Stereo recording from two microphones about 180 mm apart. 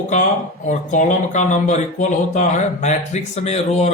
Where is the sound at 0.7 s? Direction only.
45° left (ahead or behind).